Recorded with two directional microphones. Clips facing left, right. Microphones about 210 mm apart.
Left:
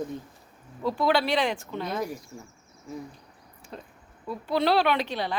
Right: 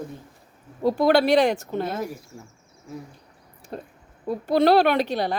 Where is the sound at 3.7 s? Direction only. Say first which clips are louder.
Right 7 dB; 45° right (ahead or behind).